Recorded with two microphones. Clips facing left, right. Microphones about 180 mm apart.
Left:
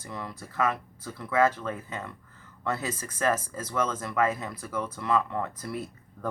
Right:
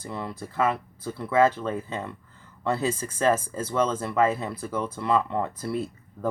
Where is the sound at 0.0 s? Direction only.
25° right (ahead or behind).